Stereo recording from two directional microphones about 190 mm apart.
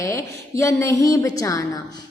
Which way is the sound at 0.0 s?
15° left (ahead or behind).